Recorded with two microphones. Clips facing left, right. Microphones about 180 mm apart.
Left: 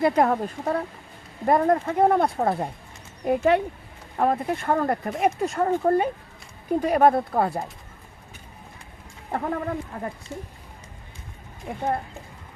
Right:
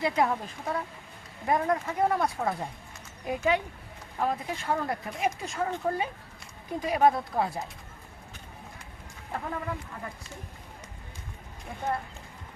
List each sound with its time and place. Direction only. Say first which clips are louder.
0.0 s speech: left 6 dB; 50° left (ahead or behind)
9.3 s speech: left 7 dB; 50° left (ahead or behind)